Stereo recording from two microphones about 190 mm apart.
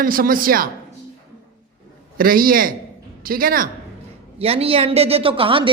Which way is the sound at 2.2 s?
50° right (ahead or behind).